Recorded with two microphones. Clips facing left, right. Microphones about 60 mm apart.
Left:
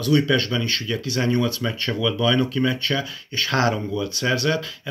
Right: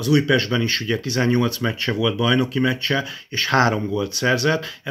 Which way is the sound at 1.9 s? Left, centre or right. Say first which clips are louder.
Right 1 dB; centre.